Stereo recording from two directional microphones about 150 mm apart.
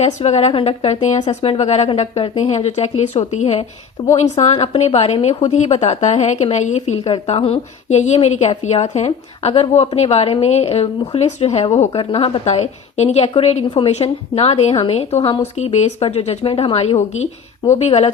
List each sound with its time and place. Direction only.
0.0 s a woman's voice: 45° left (ahead or behind)